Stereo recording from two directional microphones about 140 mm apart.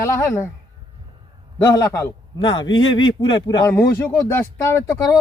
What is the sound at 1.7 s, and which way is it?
Speech, 20° left (ahead or behind).